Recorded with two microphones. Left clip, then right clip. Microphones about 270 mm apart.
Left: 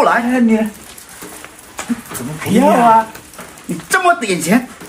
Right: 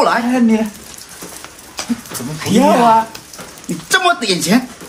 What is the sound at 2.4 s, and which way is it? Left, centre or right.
Speech, centre.